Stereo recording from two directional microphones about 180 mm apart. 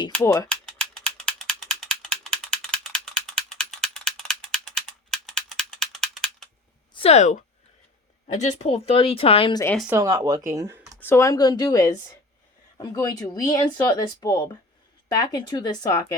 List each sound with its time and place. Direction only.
0.1 s speech: 5° left (ahead or behind)
0.4 s mechanisms: 5° left (ahead or behind)
6.9 s a woman's voice: 35° left (ahead or behind)
9.9 s speech: 20° right (ahead or behind)
11.0 s speech: 15° left (ahead or behind)